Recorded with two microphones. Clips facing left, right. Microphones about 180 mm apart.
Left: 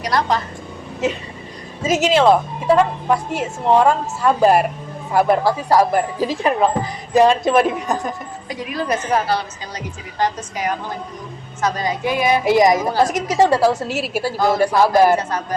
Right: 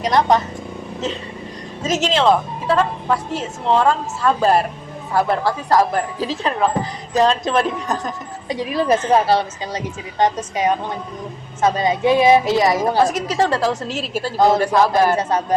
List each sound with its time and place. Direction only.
0.0 s a woman's voice: 20° right (ahead or behind)
1.0 s speech: 10° left (ahead or behind)
8.4 s a woman's voice: 25° right (ahead or behind)
12.5 s speech: 15° left (ahead or behind)